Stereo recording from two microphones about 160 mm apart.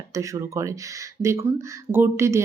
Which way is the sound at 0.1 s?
20° right (ahead or behind).